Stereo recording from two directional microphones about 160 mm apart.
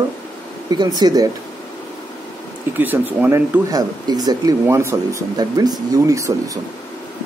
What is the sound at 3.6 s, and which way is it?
Speech, 25° right (ahead or behind).